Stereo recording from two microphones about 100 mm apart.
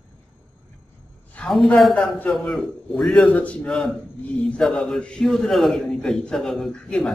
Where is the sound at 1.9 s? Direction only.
15° left (ahead or behind).